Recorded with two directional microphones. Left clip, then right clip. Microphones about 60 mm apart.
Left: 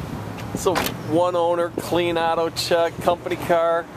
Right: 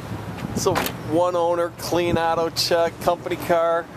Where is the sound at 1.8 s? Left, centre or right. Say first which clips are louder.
Even; centre.